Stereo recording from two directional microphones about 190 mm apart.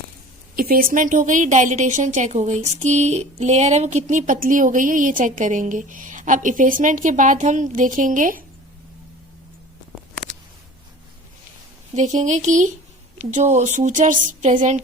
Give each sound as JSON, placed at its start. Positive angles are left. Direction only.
{"t": 0.5, "sound": "a woman's voice", "side_deg": -50}
{"t": 11.9, "sound": "speech", "side_deg": -40}